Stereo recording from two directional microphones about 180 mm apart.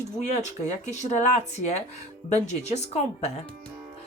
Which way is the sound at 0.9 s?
40° left (ahead or behind).